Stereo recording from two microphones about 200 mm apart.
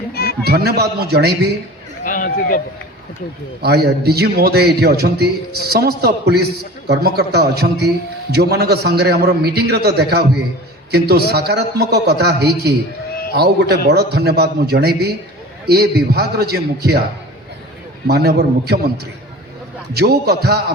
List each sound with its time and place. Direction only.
0.1 s a sound: 50° left (ahead or behind)
0.4 s a man's voice: 50° right (ahead or behind)
2.0 s speech: 45° left (ahead or behind)
3.6 s a man's voice: 50° right (ahead or behind)
18.1 s a man's voice: 50° right (ahead or behind)
19.9 s a man's voice: 50° right (ahead or behind)